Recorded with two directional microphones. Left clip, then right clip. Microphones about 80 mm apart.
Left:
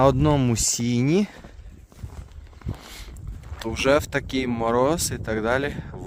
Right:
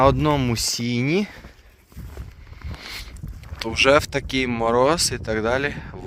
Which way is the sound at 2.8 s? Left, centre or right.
Left.